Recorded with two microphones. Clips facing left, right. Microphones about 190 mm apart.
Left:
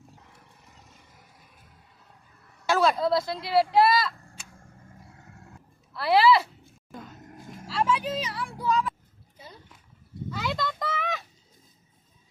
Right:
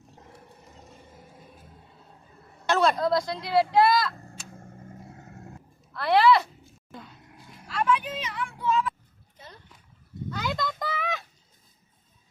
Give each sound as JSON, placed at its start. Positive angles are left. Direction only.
{"t": 2.6, "sound": "speech", "side_deg": 5}
{"t": 4.5, "sound": "vehicle", "side_deg": -40}
{"t": 5.9, "sound": "speech", "side_deg": 5}
{"t": 7.0, "sound": "a sound", "side_deg": 45}
{"t": 7.7, "sound": "vehicle", "side_deg": 25}
{"t": 10.2, "sound": "a sound", "side_deg": 0}